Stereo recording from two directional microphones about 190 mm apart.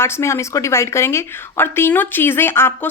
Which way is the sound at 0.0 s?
15° left (ahead or behind).